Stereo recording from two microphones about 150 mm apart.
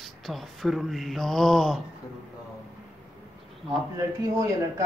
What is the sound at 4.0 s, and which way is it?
Speech, 20° right (ahead or behind).